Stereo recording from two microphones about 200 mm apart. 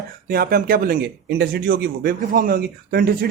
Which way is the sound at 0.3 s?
45° right (ahead or behind).